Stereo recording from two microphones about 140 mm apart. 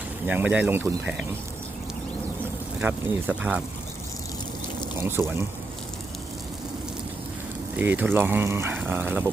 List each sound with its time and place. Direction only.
0.3 s speech: 10° right (ahead or behind)
2.8 s speech: 10° right (ahead or behind)
4.9 s speech: 15° right (ahead or behind)
7.8 s speech: 10° right (ahead or behind)